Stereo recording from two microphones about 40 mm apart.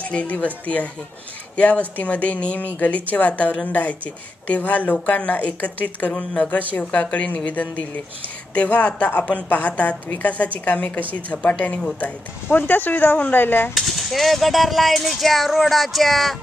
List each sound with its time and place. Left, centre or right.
0.0 s speech: left
1.6 s speech: left
12.5 s speech: left
13.7 s a sound: centre